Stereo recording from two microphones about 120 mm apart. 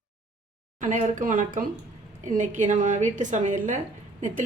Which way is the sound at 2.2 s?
90° right.